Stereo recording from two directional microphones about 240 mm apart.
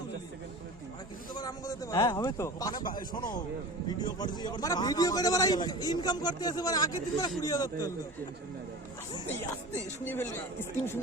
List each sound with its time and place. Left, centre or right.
1.4 s a man's voice: centre
10.0 s a man's voice: centre